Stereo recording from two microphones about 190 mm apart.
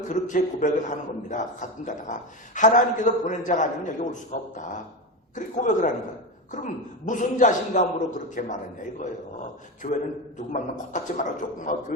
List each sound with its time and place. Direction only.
0.1 s a man's voice: 40° left (ahead or behind)
9.8 s a man's voice: 45° left (ahead or behind)